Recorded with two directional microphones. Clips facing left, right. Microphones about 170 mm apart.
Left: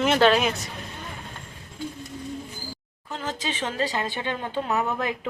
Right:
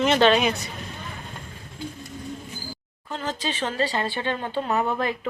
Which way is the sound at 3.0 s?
10° left (ahead or behind).